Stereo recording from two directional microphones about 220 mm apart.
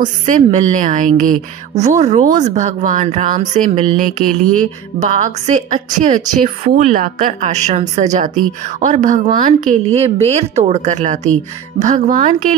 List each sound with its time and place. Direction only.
0.0 s a woman's voice: 35° right (ahead or behind)
4.9 s a woman's voice: 35° right (ahead or behind)